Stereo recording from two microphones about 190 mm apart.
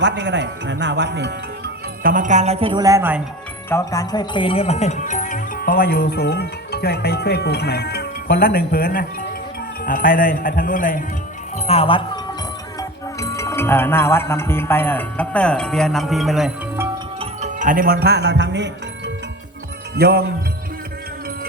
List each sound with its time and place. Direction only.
0.0 s speech: 70° right (ahead or behind); by 3.2 s 15° right (ahead or behind)
3.7 s speech: 15° left (ahead or behind); by 11.0 s 45° left (ahead or behind)
11.5 s music: 35° left (ahead or behind)
13.1 s speech: 15° left (ahead or behind); by 16.5 s centre (ahead or behind)
17.2 s music: 40° right (ahead or behind); by 19.1 s 65° right (ahead or behind)
20.0 s speech: 55° right (ahead or behind)